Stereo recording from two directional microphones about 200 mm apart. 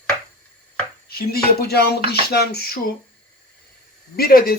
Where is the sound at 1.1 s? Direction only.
50° left (ahead or behind).